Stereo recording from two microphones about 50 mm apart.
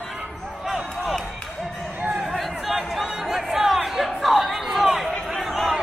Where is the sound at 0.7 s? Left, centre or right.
Centre.